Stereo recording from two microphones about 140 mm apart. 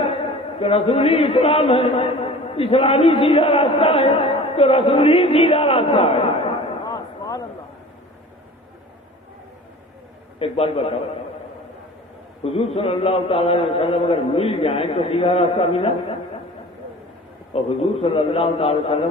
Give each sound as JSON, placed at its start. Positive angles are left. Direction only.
{"t": 0.6, "sound": "a man's voice", "side_deg": 45}
{"t": 6.8, "sound": "a sound", "side_deg": 25}
{"t": 10.4, "sound": "a man's voice", "side_deg": 45}
{"t": 12.4, "sound": "a man's voice", "side_deg": 45}
{"t": 17.5, "sound": "a man's voice", "side_deg": 45}